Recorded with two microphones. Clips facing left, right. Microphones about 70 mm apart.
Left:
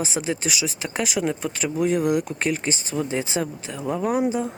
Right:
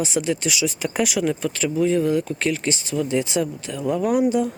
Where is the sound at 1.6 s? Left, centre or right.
Left.